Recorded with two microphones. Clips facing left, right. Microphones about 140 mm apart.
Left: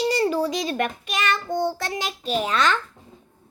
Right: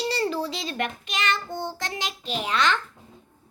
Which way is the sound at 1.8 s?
20° right (ahead or behind).